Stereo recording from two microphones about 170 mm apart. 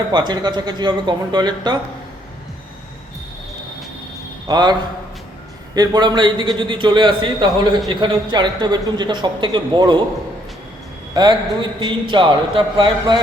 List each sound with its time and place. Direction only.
0.1 s a man's voice: 25° right (ahead or behind)
4.4 s a man's voice: 25° right (ahead or behind)
11.1 s a man's voice: 25° right (ahead or behind)